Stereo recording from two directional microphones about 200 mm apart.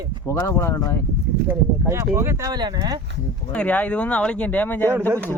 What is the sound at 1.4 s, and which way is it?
Speech, 10° right (ahead or behind).